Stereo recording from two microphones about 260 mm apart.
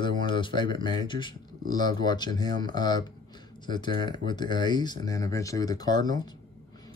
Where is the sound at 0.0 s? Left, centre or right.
Centre.